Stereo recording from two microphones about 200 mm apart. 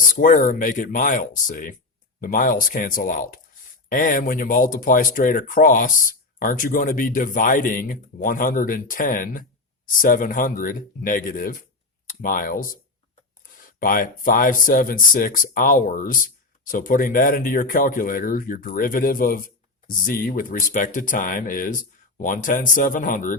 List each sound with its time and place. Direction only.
0.2 s speech: 45° left (ahead or behind)